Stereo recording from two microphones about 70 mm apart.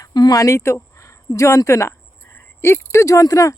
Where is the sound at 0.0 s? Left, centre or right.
Left.